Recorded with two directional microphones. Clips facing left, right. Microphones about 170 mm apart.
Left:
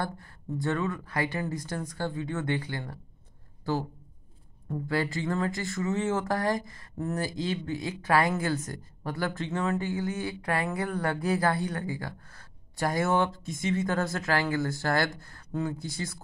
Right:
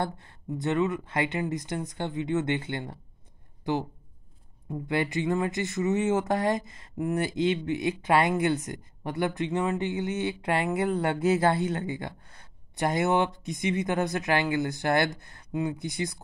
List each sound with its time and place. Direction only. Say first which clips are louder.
0.0 s speech: right 3 dB; 20° right (ahead or behind)